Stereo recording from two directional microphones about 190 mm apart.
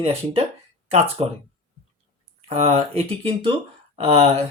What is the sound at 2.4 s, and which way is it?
Speech, 30° right (ahead or behind).